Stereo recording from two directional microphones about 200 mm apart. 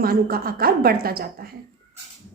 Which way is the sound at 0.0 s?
50° right (ahead or behind).